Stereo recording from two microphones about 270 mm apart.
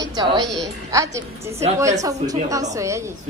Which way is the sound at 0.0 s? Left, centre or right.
Centre.